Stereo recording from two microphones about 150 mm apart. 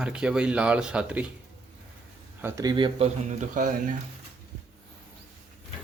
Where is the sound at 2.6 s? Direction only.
30° right (ahead or behind).